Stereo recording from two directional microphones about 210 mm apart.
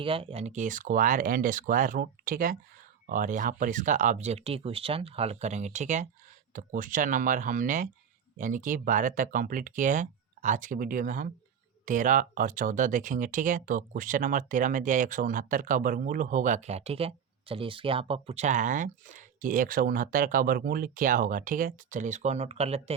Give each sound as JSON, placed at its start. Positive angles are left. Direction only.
{"t": 0.0, "sound": "speech", "side_deg": -25}